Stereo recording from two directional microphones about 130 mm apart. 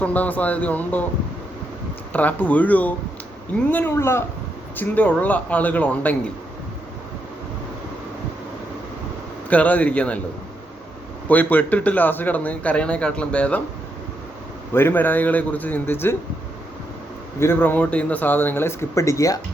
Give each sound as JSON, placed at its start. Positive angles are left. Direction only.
{"t": 0.0, "sound": "a man's voice", "side_deg": 10}
{"t": 2.1, "sound": "a man's voice", "side_deg": 10}
{"t": 9.5, "sound": "a man's voice", "side_deg": 10}
{"t": 11.3, "sound": "a man's voice", "side_deg": 15}
{"t": 14.7, "sound": "a man's voice", "side_deg": 15}
{"t": 17.4, "sound": "a man's voice", "side_deg": 15}